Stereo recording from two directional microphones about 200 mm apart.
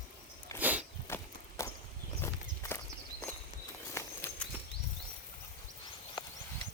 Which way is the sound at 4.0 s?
15° left (ahead or behind).